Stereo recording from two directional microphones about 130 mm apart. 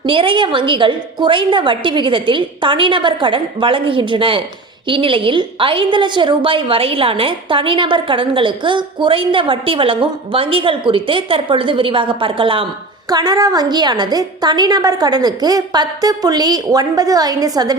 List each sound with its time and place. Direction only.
0.0 s a woman's voice: 40° right (ahead or behind)
13.1 s a woman's voice: 30° right (ahead or behind)